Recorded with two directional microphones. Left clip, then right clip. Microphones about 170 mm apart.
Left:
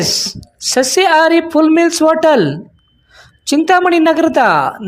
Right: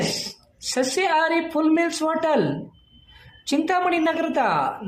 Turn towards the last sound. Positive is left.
turn(degrees=50)  # may be behind; listen again after turning